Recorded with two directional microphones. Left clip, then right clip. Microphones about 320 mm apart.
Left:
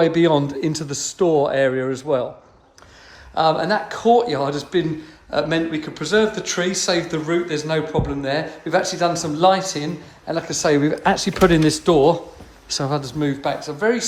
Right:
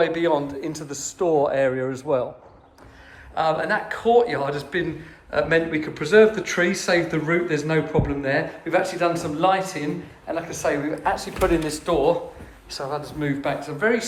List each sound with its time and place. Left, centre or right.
0.0 s speech: centre
3.3 s speech: centre